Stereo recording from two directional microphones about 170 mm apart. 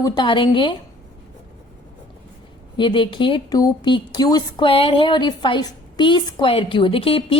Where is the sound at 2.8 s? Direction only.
30° left (ahead or behind).